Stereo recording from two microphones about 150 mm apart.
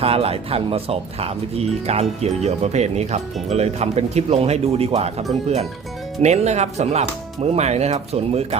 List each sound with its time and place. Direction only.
0.0 s speech: 40° right (ahead or behind)